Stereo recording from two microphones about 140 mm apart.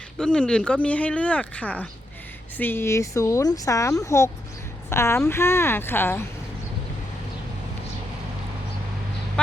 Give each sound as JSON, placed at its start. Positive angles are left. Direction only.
{"t": 0.2, "sound": "speech", "side_deg": 5}